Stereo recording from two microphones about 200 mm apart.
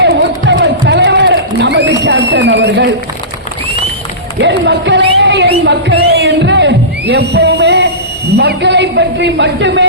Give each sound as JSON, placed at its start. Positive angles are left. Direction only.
{"t": 0.0, "sound": "a sound", "side_deg": -60}
{"t": 4.4, "sound": "crowd", "side_deg": -60}
{"t": 8.4, "sound": "speech", "side_deg": -55}